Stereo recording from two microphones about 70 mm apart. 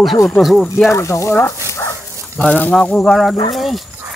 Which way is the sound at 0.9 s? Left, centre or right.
Left.